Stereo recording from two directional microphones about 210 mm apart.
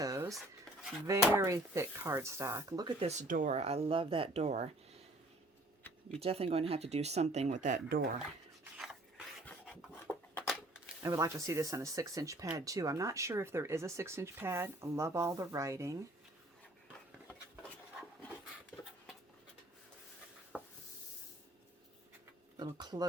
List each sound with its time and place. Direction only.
0.0 s cutlery: 15° right (ahead or behind)
1.2 s speech: 10° right (ahead or behind)
3.1 s speech: 35° right (ahead or behind)
6.1 s speech: 30° right (ahead or behind)
8.8 s rub: centre (ahead or behind)
11.0 s speech: 15° right (ahead or behind)
17.2 s a sound: 5° left (ahead or behind)
20.5 s rub: 5° right (ahead or behind)
22.5 s speech: 20° right (ahead or behind)